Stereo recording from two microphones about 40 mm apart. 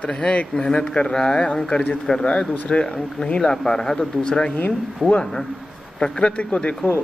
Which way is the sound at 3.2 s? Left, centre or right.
Centre.